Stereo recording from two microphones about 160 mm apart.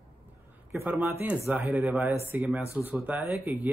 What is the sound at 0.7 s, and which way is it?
A man's voice, 10° right (ahead or behind).